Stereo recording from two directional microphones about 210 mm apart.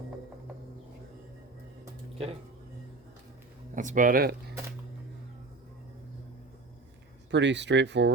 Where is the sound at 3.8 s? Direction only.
40° right (ahead or behind).